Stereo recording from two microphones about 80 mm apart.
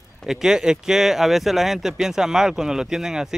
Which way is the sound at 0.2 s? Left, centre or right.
Centre.